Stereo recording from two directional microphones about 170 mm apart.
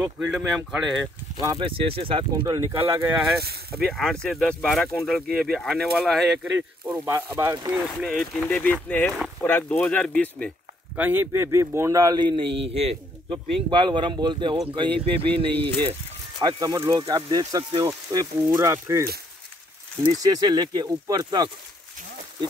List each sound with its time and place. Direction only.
0.0 s speech: 5° right (ahead or behind)
1.4 s speech: 25° right (ahead or behind); by 3.3 s 10° right (ahead or behind)
3.7 s speech: centre (ahead or behind)
7.1 s speech: 20° right (ahead or behind)
7.7 s speech: centre (ahead or behind)
11.0 s speech: 10° right (ahead or behind)
12.4 s a man's voice: 90° right
12.8 s speech: 25° right (ahead or behind)